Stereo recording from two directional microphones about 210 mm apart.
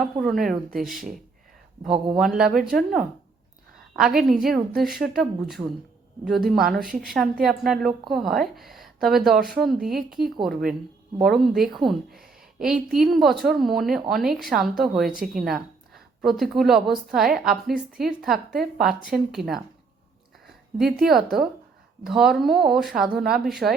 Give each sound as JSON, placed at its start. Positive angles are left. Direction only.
{"t": 0.0, "sound": "a woman's voice", "side_deg": 0}
{"t": 1.8, "sound": "speech", "side_deg": -25}
{"t": 2.1, "sound": "a woman's voice", "side_deg": -5}
{"t": 4.0, "sound": "a woman's voice", "side_deg": 0}
{"t": 21.0, "sound": "a woman's voice", "side_deg": 0}